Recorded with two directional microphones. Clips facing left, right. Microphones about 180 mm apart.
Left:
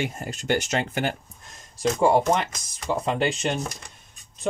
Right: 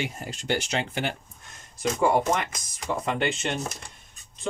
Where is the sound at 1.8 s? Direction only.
30° left (ahead or behind).